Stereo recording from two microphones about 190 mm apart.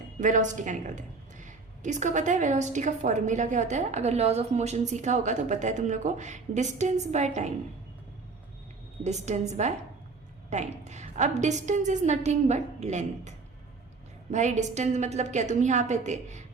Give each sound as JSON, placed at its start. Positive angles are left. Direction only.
{"t": 0.2, "sound": "a woman's voice", "side_deg": -40}
{"t": 9.0, "sound": "a woman's voice", "side_deg": -35}